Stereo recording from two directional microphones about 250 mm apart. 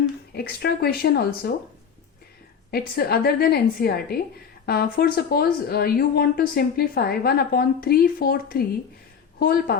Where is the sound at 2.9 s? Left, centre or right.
Left.